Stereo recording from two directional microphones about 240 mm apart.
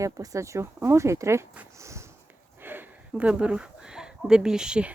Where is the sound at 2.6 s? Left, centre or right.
Centre.